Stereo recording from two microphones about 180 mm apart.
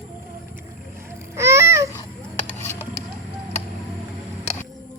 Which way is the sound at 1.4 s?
15° right (ahead or behind).